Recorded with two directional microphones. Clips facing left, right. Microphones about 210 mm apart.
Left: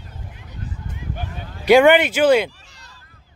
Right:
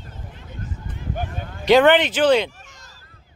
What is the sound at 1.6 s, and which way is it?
Speech, 10° left (ahead or behind).